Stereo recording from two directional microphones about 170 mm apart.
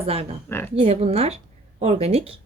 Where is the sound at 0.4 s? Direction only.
10° left (ahead or behind).